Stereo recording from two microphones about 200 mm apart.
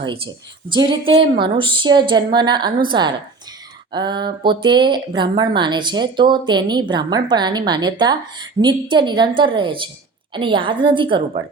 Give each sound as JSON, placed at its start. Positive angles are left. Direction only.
{"t": 0.7, "sound": "speech", "side_deg": -25}